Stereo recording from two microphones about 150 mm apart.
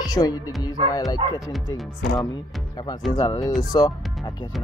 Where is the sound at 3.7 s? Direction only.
30° left (ahead or behind).